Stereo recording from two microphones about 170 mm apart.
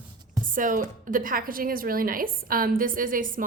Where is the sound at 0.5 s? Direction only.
50° right (ahead or behind).